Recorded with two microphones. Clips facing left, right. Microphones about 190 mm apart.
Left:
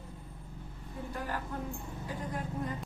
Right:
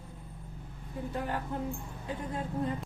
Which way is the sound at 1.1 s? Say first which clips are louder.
Right 3 dB; 25° right (ahead or behind).